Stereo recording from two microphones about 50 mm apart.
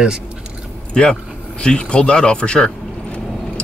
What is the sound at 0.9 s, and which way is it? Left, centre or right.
Speech, centre.